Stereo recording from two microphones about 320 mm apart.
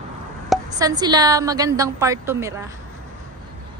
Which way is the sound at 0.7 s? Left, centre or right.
Centre.